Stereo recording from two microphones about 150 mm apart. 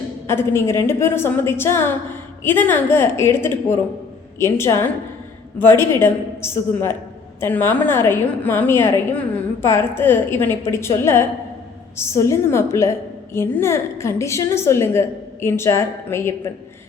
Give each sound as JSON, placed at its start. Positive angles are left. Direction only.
{"t": 0.3, "sound": "a woman's voice", "side_deg": 15}